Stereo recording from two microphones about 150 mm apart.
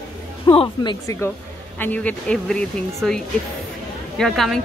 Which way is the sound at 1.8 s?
10° left (ahead or behind).